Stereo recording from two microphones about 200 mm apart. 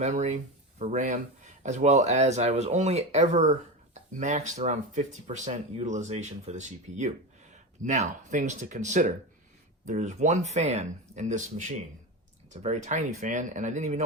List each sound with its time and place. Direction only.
0.0 s speech: 35° right (ahead or behind)